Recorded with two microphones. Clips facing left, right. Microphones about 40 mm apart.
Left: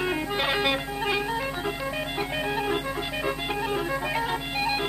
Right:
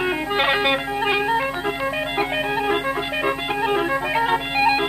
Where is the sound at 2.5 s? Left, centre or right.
Right.